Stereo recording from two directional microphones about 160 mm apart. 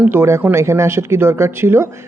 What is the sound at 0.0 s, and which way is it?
Speech, 15° right (ahead or behind).